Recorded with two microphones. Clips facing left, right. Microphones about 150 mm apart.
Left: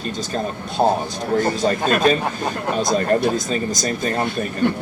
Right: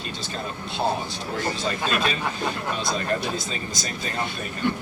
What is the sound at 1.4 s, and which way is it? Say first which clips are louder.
A man's voice: left 7 dB; 45° left (ahead or behind).